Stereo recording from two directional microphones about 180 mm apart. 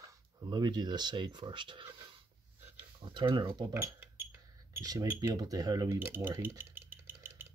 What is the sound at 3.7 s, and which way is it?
Cutlery, 15° right (ahead or behind).